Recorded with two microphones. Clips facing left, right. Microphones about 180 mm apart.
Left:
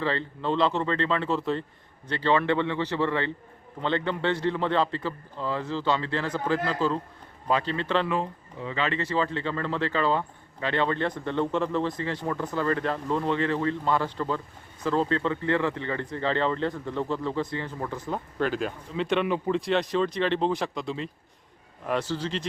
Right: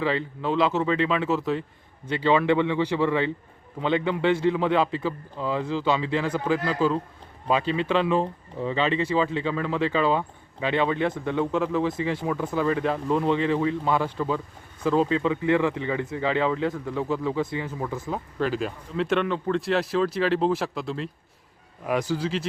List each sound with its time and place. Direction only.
0.0 s speech: 10° right (ahead or behind)
8.1 s speech: 30° right (ahead or behind)
8.8 s speech: 15° right (ahead or behind)
21.8 s speech: 10° right (ahead or behind)